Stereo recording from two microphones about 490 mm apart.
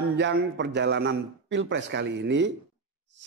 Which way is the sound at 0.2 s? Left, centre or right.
Right.